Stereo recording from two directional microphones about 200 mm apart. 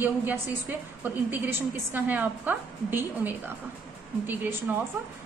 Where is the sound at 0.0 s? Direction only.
10° right (ahead or behind).